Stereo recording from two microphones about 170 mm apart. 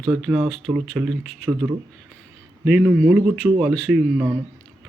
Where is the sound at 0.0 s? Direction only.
Centre (ahead or behind).